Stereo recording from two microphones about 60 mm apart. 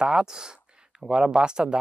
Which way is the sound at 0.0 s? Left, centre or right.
Centre.